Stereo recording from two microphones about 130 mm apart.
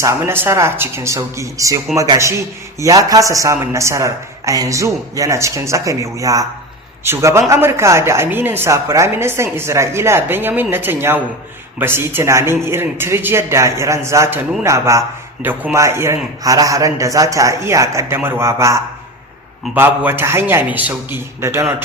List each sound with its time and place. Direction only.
0.0 s a man's voice: 20° right (ahead or behind)